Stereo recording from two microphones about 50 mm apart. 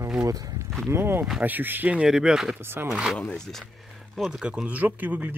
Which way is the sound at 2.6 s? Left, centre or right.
Right.